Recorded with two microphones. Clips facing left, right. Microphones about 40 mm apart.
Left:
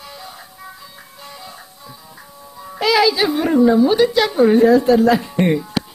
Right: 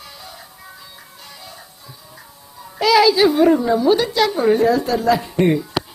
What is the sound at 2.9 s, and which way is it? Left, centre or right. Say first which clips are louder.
A woman's voice: right 4 dB; centre.